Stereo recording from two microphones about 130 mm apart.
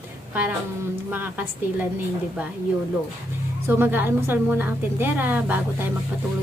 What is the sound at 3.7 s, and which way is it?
A woman's voice, 15° right (ahead or behind).